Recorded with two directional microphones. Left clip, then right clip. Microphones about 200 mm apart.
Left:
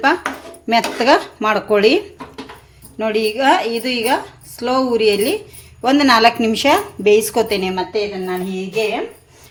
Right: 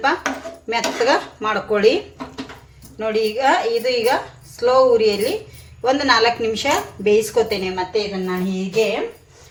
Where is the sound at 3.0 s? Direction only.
50° left (ahead or behind).